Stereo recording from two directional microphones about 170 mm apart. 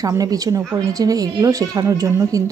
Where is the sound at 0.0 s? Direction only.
20° right (ahead or behind).